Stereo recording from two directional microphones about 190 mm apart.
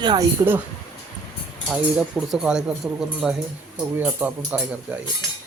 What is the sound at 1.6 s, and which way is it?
Speech, 5° right (ahead or behind).